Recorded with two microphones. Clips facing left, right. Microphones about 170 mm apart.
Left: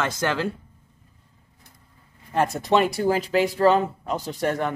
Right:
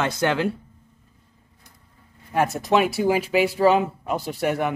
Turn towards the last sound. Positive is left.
turn(degrees=-10)  # may be behind; listen again after turning